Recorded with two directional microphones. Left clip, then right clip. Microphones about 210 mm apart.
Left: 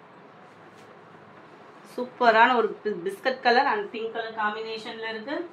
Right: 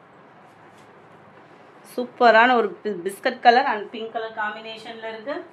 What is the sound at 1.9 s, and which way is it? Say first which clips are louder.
Speech: right 5 dB; 55° right (ahead or behind).